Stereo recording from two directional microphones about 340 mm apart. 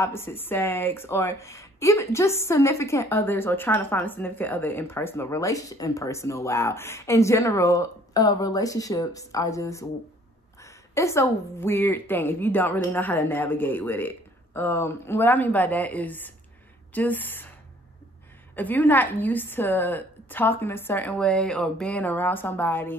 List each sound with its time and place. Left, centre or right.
0.0 s a woman's voice: centre
18.6 s a woman's voice: centre